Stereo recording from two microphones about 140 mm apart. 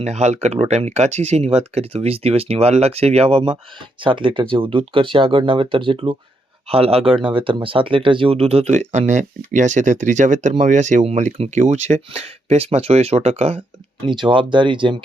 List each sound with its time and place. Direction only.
0.0 s speech: 55° right (ahead or behind)
14.0 s speech: 35° right (ahead or behind)